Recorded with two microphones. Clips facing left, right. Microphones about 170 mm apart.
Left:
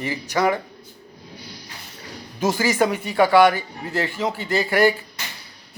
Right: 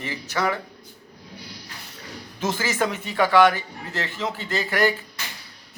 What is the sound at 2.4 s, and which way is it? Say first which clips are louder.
Speech: left 5 dB; 10° left (ahead or behind).